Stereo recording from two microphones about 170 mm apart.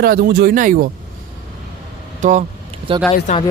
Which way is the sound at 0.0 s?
65° right (ahead or behind).